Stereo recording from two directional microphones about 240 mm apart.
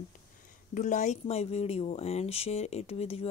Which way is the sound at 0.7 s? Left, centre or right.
Left.